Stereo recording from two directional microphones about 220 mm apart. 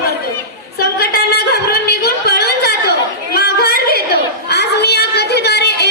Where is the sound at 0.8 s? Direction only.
45° left (ahead or behind).